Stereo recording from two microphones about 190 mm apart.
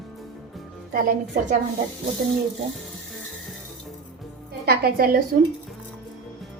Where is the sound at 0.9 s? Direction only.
45° right (ahead or behind).